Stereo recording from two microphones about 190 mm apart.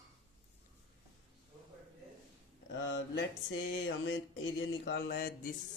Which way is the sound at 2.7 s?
70° left (ahead or behind).